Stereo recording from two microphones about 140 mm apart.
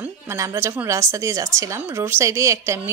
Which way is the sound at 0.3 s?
20° right (ahead or behind).